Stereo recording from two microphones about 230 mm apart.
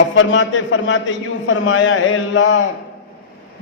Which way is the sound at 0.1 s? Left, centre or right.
Left.